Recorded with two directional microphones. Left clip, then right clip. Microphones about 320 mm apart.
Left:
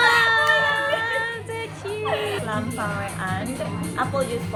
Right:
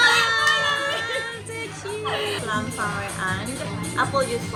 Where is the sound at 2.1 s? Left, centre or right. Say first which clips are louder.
Even; centre.